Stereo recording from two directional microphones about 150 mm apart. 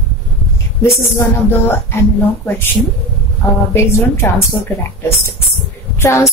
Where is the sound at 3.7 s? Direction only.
15° left (ahead or behind).